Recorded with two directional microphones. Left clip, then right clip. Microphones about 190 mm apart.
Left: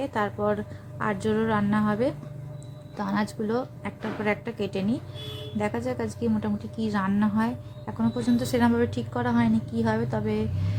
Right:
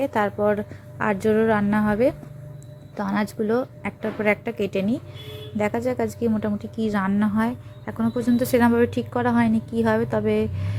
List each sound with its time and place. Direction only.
0.0 s a woman's voice: 30° right (ahead or behind)